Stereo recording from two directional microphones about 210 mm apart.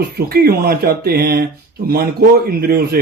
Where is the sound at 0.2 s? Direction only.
45° right (ahead or behind).